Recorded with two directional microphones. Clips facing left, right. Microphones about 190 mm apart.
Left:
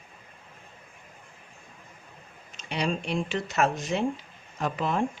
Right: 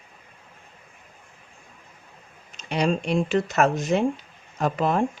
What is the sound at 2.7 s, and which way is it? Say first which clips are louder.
Speech: right 6 dB; 45° right (ahead or behind).